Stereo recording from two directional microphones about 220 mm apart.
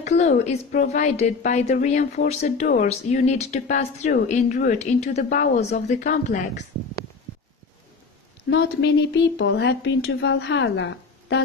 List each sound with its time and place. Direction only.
0.0 s a woman's voice: 30° left (ahead or behind)
8.5 s a woman's voice: 55° left (ahead or behind)